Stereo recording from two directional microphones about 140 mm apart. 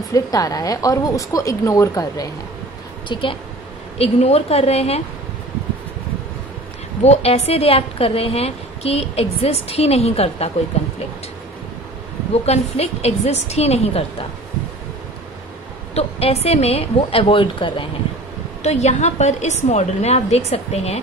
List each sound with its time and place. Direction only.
0.1 s a woman's voice: 25° left (ahead or behind)
3.1 s a woman's voice: 40° left (ahead or behind)
7.0 s a woman's voice: 50° left (ahead or behind)
12.4 s a woman's voice: 50° left (ahead or behind)
15.9 s a woman's voice: 45° left (ahead or behind)
18.6 s a woman's voice: 55° left (ahead or behind)